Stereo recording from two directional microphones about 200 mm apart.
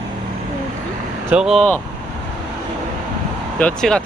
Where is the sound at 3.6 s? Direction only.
5° left (ahead or behind).